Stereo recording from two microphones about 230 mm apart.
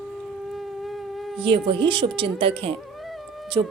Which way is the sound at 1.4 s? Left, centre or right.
Right.